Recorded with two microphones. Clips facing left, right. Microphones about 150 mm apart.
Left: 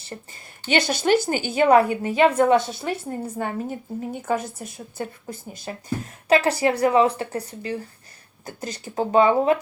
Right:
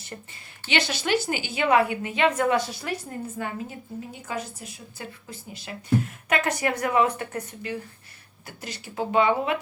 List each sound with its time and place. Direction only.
0.0 s speech: 30° left (ahead or behind)
0.7 s speech: 45° left (ahead or behind); by 3.1 s 25° left (ahead or behind)
3.2 s speech: 40° left (ahead or behind)